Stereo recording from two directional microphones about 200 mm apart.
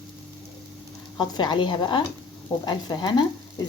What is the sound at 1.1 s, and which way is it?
Speech, 20° left (ahead or behind).